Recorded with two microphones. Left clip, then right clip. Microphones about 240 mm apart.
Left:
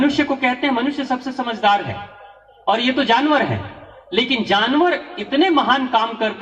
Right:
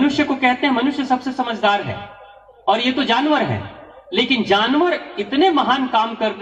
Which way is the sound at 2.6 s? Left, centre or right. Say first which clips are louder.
Even; left.